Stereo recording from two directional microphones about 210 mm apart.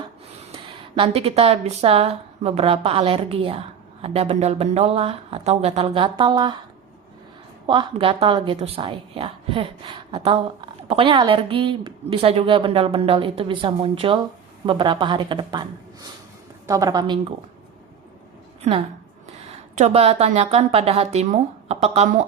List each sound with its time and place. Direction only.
0.4 s a woman's voice: 25° right (ahead or behind)
7.7 s a woman's voice: 25° right (ahead or behind)
19.7 s a woman's voice: 30° right (ahead or behind)